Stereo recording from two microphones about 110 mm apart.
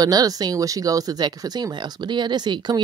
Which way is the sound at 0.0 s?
35° right (ahead or behind).